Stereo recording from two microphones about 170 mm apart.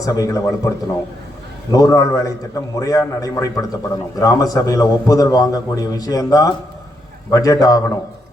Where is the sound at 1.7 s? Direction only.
20° left (ahead or behind).